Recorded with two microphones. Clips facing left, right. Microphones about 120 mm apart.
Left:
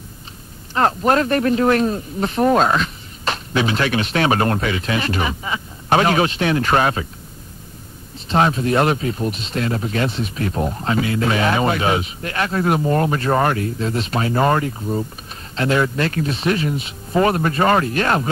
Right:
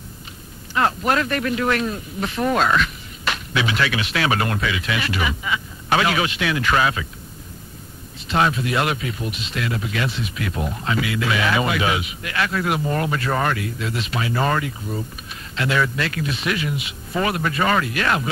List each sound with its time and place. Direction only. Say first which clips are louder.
0.7 s speech: left 4 dB; 35° left (ahead or behind)
8.3 s speech: left 3 dB; 30° left (ahead or behind)